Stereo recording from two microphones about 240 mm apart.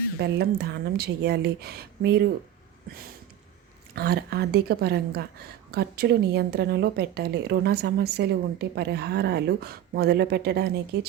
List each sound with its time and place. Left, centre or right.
0.2 s a woman's voice: right
3.9 s a woman's voice: right